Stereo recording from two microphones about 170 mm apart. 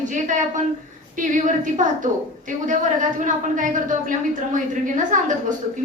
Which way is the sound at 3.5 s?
50° right (ahead or behind).